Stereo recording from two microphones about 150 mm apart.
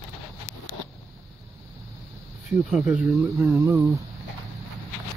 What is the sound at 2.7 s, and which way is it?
Speech, 5° right (ahead or behind).